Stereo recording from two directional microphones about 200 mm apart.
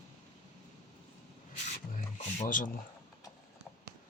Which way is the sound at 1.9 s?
35° left (ahead or behind).